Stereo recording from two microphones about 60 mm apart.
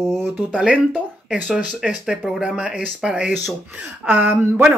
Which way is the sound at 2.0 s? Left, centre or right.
Centre.